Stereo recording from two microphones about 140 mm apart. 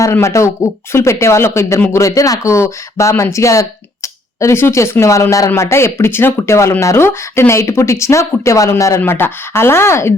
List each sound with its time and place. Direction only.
0.0 s speech: 20° left (ahead or behind)